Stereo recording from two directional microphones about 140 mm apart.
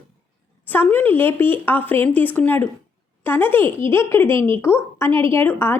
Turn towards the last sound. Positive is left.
turn(degrees=15)  # may be behind; listen again after turning